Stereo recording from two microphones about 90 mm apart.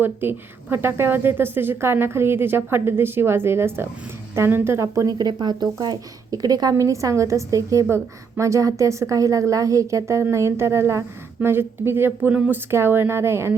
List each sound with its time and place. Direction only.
0.0 s a woman's voice: 25° right (ahead or behind)
5.1 s a woman's voice: 50° right (ahead or behind); by 13.6 s 30° right (ahead or behind)